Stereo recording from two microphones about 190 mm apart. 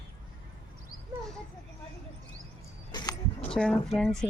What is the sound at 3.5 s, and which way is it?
Speech, 5° left (ahead or behind).